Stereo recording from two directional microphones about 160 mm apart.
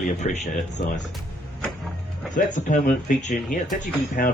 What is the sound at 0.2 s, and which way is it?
Speech, 50° left (ahead or behind).